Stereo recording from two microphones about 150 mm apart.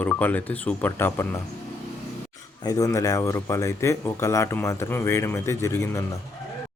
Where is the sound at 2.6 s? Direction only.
25° left (ahead or behind).